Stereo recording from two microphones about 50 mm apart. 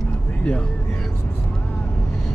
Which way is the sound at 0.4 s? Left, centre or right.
Left.